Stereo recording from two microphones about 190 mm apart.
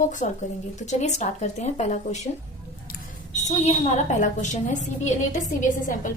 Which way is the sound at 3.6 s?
35° left (ahead or behind).